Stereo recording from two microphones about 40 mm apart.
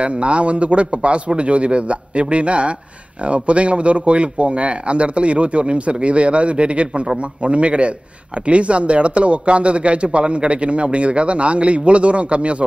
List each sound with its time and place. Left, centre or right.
0.0 s a man's voice: right